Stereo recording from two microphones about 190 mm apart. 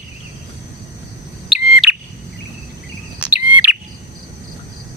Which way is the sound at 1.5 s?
Centre (ahead or behind).